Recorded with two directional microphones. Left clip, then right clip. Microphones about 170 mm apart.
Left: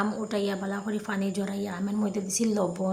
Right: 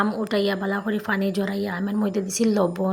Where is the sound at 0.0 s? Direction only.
25° right (ahead or behind).